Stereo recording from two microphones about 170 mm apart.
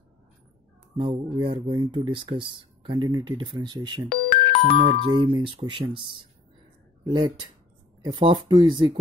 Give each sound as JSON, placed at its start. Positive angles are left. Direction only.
{"t": 0.9, "sound": "speech", "side_deg": -30}
{"t": 4.1, "sound": "speech", "side_deg": 35}
{"t": 5.2, "sound": "speech", "side_deg": -30}